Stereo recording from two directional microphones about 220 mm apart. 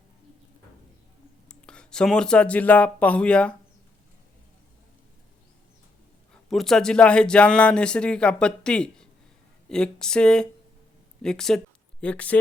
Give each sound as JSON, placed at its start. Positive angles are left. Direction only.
{"t": 1.5, "sound": "speech", "side_deg": 5}
{"t": 6.3, "sound": "speech", "side_deg": 0}